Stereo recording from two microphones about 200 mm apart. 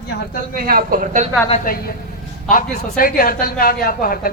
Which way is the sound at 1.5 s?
35° left (ahead or behind).